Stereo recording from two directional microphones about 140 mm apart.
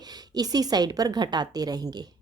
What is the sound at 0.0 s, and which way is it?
A woman's voice, 30° right (ahead or behind).